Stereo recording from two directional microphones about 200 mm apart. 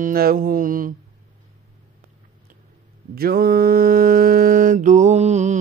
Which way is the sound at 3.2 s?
50° right (ahead or behind).